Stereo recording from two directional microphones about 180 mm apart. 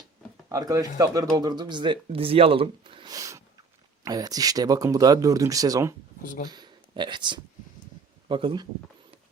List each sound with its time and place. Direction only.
0.4 s speech: 20° right (ahead or behind)
6.2 s speech: 50° left (ahead or behind)
6.5 s speech: 25° right (ahead or behind)